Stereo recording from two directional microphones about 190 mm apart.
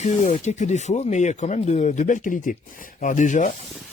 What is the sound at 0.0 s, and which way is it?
Speech, 40° left (ahead or behind).